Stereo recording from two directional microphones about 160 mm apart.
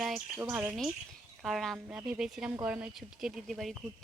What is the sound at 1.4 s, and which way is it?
Speech, centre (ahead or behind).